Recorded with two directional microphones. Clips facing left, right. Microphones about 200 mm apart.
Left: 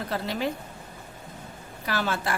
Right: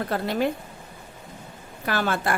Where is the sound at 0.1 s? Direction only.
55° right (ahead or behind).